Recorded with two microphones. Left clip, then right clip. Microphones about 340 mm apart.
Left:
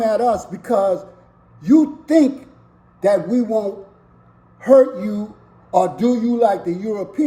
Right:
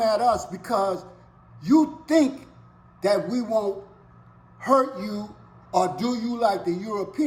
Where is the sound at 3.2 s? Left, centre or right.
Centre.